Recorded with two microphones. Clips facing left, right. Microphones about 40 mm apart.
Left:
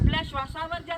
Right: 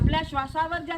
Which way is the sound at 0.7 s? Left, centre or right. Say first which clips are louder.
Right 2 dB; centre.